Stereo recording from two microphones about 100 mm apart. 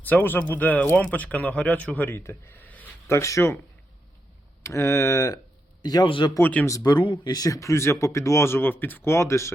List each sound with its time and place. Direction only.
0.0 s speech: 20° left (ahead or behind)
3.2 s speech: 30° left (ahead or behind)
4.6 s a man's voice: 30° left (ahead or behind)
6.1 s speech: 55° left (ahead or behind)
6.4 s speech: 15° left (ahead or behind)
6.7 s speech: 40° left (ahead or behind)